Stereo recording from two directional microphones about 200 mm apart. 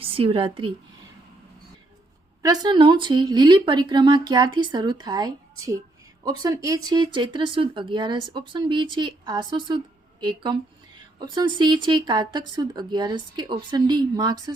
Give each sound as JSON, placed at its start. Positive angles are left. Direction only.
{"t": 0.0, "sound": "speech", "side_deg": -25}
{"t": 2.4, "sound": "speech", "side_deg": -20}